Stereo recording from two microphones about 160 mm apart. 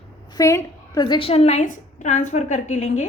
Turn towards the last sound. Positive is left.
turn(degrees=45)  # may be behind; listen again after turning